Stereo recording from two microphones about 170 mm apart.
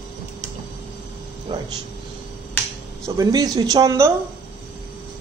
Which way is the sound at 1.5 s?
30° right (ahead or behind).